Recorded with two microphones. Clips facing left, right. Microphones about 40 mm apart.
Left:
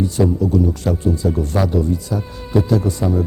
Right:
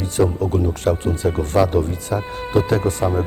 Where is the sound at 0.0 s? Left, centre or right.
Right.